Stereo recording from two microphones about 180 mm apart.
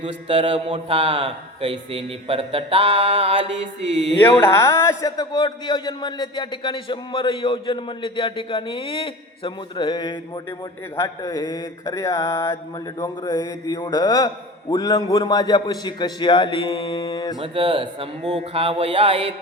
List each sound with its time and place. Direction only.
0.0 s a man's voice: 30° right (ahead or behind)
1.9 s a sound: 30° right (ahead or behind)
4.2 s a man's voice: 10° left (ahead or behind)
10.9 s mantra: 15° left (ahead or behind)
13.0 s a man's voice: 20° left (ahead or behind)
17.4 s a man's voice: 30° right (ahead or behind)
18.3 s a sound: 35° right (ahead or behind)